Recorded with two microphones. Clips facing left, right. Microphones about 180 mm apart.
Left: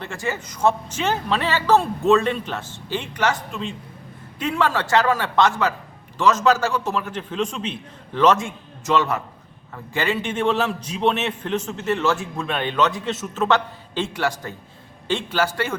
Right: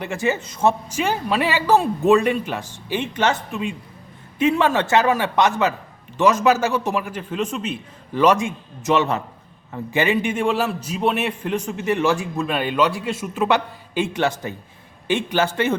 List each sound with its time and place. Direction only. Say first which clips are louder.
0.0 s a man's voice: right 5 dB; 20° right (ahead or behind)